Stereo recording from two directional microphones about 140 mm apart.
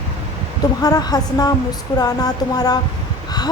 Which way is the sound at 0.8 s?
30° left (ahead or behind).